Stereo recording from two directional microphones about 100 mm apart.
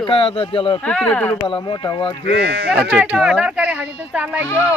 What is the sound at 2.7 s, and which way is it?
Speech, 15° right (ahead or behind).